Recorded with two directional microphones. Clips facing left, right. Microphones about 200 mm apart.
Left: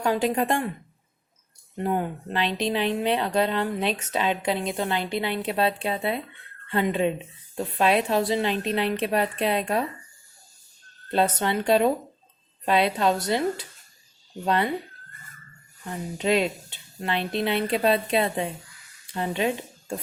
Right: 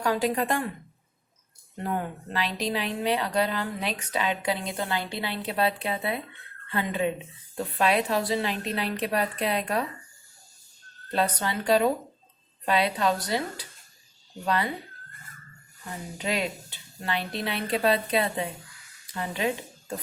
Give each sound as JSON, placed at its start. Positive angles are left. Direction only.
{"t": 0.0, "sound": "speech", "side_deg": 20}
{"t": 1.8, "sound": "speech", "side_deg": 20}
{"t": 11.1, "sound": "speech", "side_deg": 25}
{"t": 16.1, "sound": "speech", "side_deg": 25}
{"t": 19.1, "sound": "speech", "side_deg": 20}